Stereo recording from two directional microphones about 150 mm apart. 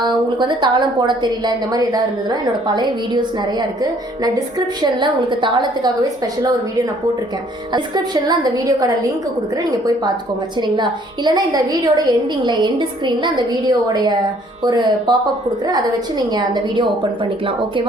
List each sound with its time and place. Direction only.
0.3 s a woman's voice: 30° right (ahead or behind)
10.6 s a woman's voice: 30° right (ahead or behind)